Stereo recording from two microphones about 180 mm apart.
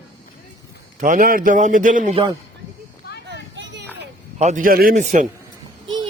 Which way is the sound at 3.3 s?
85° right.